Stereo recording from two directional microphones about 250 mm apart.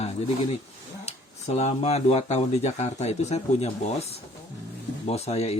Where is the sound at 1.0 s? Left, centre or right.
Left.